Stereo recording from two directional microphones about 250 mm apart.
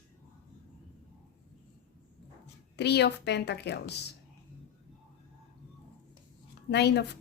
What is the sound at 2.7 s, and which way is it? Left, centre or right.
A woman's voice, left.